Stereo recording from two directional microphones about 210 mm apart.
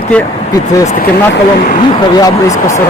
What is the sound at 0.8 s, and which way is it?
Speech, 40° left (ahead or behind).